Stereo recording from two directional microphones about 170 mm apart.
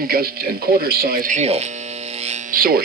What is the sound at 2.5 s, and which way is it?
Speech, 60° right (ahead or behind).